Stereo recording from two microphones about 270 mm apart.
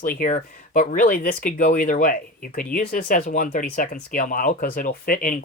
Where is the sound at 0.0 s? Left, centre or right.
Left.